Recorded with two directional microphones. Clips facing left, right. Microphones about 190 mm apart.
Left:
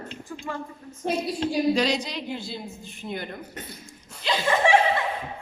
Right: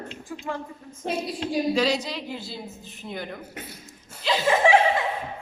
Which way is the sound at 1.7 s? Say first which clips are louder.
Even; 5° right (ahead or behind).